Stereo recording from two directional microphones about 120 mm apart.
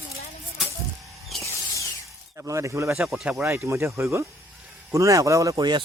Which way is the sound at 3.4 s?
20° right (ahead or behind).